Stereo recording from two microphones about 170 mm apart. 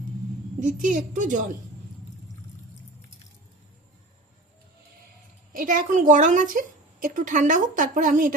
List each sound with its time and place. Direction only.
0.8 s a woman's voice: 50° right (ahead or behind)
5.5 s a woman's voice: 50° right (ahead or behind)